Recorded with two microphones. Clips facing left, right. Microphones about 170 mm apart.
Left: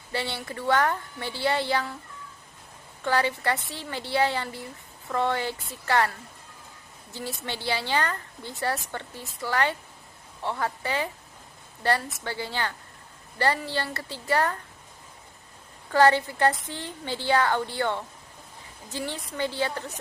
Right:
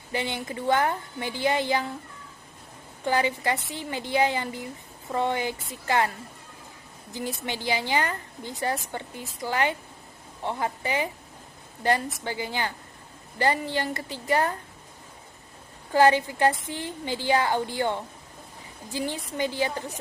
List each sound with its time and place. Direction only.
0.1 s a woman's voice: 15° right (ahead or behind)
3.0 s a woman's voice: 15° right (ahead or behind)
15.9 s a woman's voice: 15° right (ahead or behind)